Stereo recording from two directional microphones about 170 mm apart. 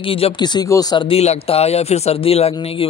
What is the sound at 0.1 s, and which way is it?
Speech, 30° left (ahead or behind).